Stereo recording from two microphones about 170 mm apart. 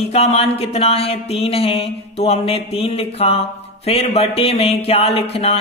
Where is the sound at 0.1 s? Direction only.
40° left (ahead or behind).